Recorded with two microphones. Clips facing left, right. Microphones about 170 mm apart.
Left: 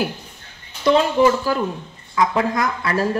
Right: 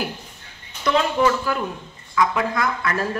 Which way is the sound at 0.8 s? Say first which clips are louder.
Left 4 dB; 30° left (ahead or behind).